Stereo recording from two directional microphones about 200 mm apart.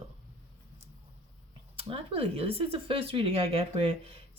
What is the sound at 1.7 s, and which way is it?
Speech, 30° right (ahead or behind).